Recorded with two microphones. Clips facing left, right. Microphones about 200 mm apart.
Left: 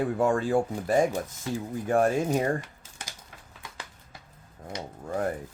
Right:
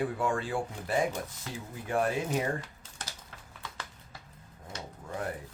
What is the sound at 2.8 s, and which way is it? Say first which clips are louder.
Typing: even; 10° left (ahead or behind).